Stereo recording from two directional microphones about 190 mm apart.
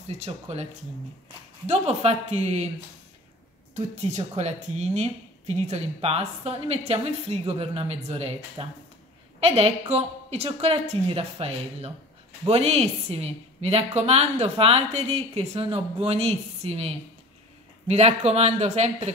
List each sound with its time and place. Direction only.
0.1 s a woman's voice: 35° right (ahead or behind)
1.7 s a woman's voice: 35° right (ahead or behind)
3.7 s a woman's voice: 35° right (ahead or behind)